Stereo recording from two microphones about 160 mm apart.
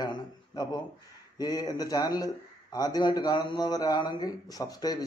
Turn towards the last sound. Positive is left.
turn(degrees=25)  # may be behind; listen again after turning